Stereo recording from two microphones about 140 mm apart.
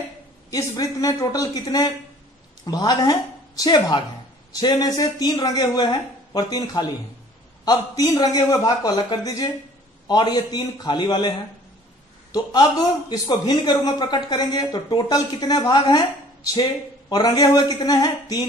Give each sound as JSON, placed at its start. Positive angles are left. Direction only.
{"t": 0.5, "sound": "a woman's voice", "side_deg": 25}
{"t": 17.1, "sound": "speech", "side_deg": 30}